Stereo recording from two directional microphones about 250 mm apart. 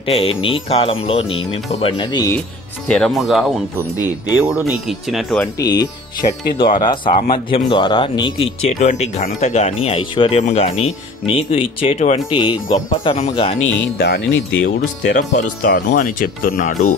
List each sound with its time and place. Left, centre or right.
0.0 s speech: left
2.9 s speech: centre
5.6 s speech: centre
13.6 s speech: left